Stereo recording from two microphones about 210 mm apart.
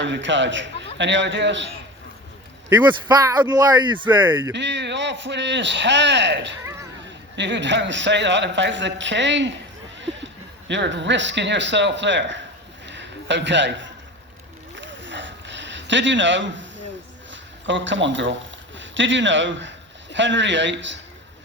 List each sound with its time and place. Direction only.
0.0 s a man's voice: 60° right (ahead or behind)
2.6 s speech: 10° right (ahead or behind)
4.2 s speech: 10° right (ahead or behind)
4.5 s a man's voice: 55° right (ahead or behind)
10.7 s a man's voice: 60° right (ahead or behind)
12.8 s a sound: 55° right (ahead or behind)
17.3 s a man's voice: 60° right (ahead or behind)